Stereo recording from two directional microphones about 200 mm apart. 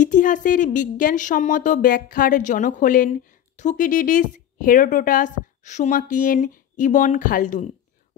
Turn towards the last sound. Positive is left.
turn(degrees=40)  # may be behind; listen again after turning